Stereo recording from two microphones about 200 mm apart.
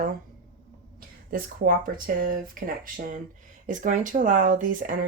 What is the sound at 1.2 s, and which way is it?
Speech, 45° right (ahead or behind).